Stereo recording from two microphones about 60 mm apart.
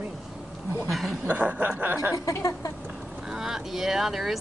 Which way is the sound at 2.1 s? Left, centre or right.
Left.